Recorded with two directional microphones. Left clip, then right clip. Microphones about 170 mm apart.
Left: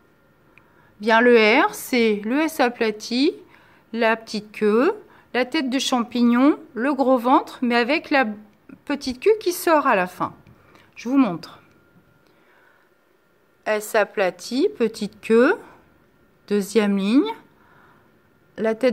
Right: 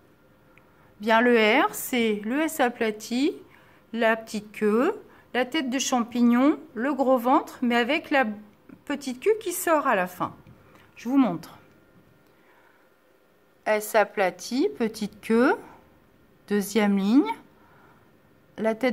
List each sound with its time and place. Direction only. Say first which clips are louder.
1.0 s a woman's voice: left 5 dB; 15° left (ahead or behind)
13.7 s a woman's voice: left 2 dB; 10° left (ahead or behind)
18.5 s speech: left 4 dB; 10° left (ahead or behind)